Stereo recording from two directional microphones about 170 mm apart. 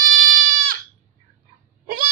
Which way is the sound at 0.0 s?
50° right (ahead or behind).